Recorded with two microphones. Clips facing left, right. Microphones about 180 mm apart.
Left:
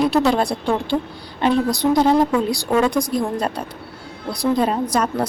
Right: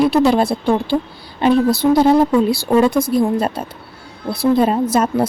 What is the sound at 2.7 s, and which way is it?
Speech, 30° right (ahead or behind).